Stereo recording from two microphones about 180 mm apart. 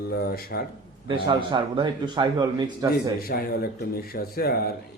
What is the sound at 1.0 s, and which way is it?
A man's voice, 25° right (ahead or behind).